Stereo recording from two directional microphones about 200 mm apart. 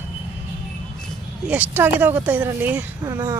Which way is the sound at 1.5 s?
10° right (ahead or behind).